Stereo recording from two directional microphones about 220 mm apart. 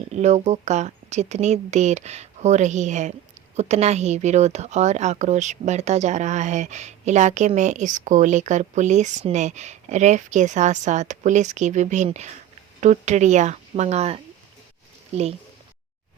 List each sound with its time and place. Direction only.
0.1 s speech: 30° right (ahead or behind)